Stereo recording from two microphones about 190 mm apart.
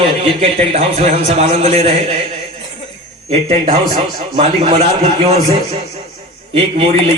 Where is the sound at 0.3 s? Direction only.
30° right (ahead or behind).